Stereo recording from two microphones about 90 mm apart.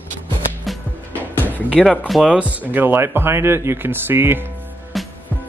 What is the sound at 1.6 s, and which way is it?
Speech, 10° right (ahead or behind).